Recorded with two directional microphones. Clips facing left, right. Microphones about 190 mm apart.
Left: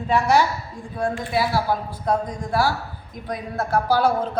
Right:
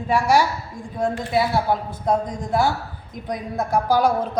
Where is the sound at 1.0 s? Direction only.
20° right (ahead or behind).